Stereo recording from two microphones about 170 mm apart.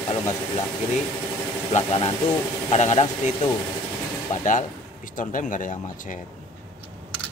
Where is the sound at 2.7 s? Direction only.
40° left (ahead or behind).